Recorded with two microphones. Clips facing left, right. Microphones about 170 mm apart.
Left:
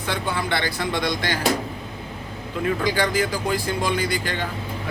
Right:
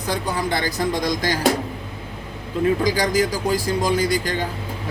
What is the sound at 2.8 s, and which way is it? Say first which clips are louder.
Speech: right 2 dB; 40° right (ahead or behind).